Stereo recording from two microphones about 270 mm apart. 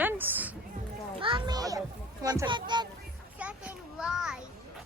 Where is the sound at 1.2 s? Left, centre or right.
Centre.